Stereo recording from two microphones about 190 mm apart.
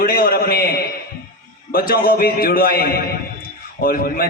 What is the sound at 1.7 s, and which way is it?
A man's voice, 50° left (ahead or behind).